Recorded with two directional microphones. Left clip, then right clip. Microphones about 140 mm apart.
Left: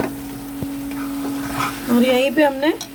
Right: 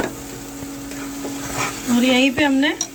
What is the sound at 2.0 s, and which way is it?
Speech, 90° left.